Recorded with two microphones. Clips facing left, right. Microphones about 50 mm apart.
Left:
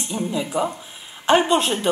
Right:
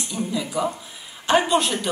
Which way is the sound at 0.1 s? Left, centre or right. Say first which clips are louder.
Left 2 dB; left.